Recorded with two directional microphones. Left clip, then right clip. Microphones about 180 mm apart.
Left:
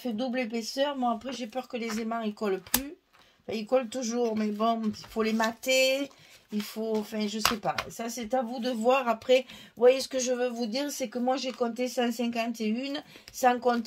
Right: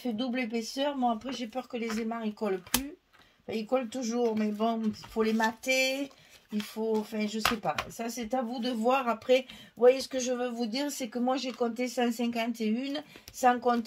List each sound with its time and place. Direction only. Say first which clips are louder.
0.0 s speech: left 2 dB; 35° left (ahead or behind)